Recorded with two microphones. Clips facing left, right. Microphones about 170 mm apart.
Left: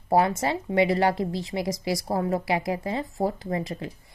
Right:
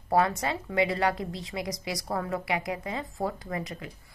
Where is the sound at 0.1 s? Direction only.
25° left (ahead or behind).